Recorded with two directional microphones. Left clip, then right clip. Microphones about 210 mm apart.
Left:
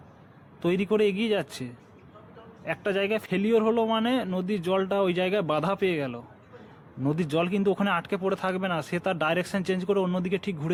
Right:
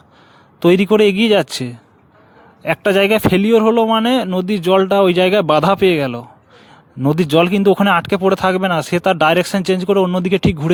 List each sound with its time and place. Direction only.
0.6 s speech: 50° right (ahead or behind)